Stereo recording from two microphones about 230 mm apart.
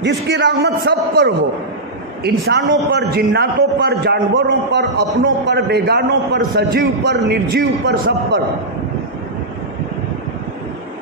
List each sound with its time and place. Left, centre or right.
0.0 s a man's voice: right
2.4 s a man's voice: right